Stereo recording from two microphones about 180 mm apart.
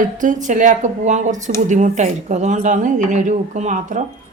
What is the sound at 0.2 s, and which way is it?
Speech, 45° right (ahead or behind).